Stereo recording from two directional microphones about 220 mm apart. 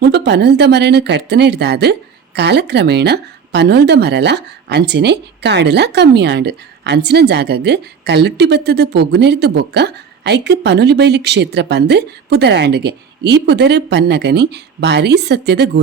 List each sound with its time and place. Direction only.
0.0 s a woman's voice: 50° right (ahead or behind)